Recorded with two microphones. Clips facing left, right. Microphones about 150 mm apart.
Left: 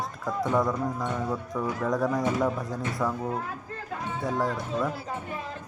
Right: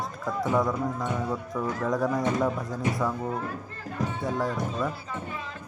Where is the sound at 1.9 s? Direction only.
Centre (ahead or behind).